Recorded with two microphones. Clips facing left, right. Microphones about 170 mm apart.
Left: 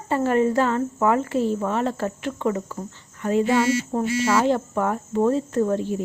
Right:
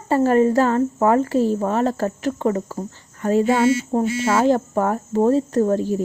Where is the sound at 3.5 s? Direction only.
30° right (ahead or behind).